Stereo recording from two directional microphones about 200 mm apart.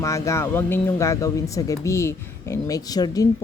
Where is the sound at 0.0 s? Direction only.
15° left (ahead or behind).